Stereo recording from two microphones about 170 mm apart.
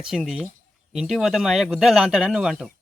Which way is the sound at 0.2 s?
Centre (ahead or behind).